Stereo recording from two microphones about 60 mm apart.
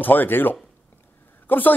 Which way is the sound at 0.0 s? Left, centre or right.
Left.